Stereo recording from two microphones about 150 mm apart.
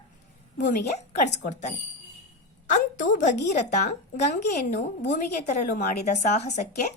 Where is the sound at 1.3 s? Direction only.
55° left (ahead or behind).